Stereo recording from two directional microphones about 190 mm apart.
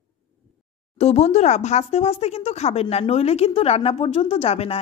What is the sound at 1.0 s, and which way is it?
Speech, 35° left (ahead or behind).